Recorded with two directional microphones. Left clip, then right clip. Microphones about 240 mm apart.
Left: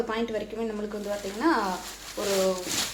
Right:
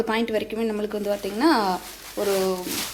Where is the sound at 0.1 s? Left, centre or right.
Right.